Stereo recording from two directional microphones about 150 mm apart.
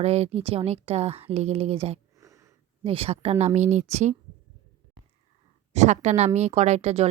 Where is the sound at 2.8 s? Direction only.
40° right (ahead or behind).